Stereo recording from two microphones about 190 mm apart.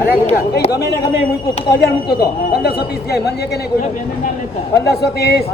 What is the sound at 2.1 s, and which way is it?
Speech, 60° left (ahead or behind).